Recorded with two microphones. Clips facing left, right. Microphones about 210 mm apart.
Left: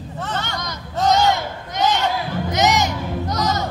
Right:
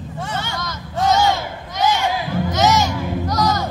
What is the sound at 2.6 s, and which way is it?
Music, 20° left (ahead or behind).